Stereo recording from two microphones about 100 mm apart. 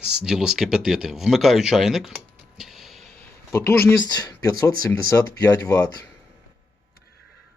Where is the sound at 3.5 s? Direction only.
30° left (ahead or behind).